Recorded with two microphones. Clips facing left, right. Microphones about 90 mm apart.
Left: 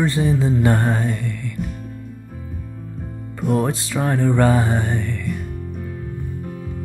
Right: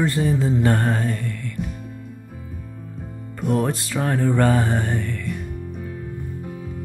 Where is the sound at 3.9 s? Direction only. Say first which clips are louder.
Left 2 dB; 15° left (ahead or behind).